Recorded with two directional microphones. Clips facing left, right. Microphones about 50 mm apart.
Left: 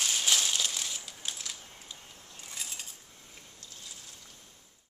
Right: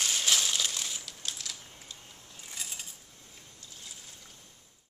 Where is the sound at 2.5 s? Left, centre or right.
Centre.